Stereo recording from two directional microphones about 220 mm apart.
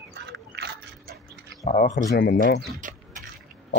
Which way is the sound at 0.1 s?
50° right (ahead or behind).